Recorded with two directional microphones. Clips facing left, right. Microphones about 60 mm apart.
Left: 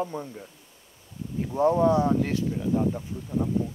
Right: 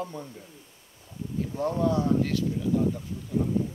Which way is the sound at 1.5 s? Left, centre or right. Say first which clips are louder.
Left 6 dB; left.